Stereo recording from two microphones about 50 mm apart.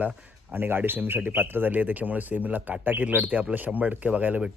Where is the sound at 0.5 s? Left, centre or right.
Right.